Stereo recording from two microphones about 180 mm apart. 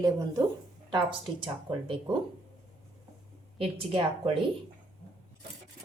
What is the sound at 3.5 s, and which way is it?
Speech, 30° right (ahead or behind).